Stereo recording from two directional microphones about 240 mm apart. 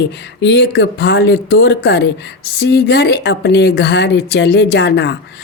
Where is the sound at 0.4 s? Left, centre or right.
Left.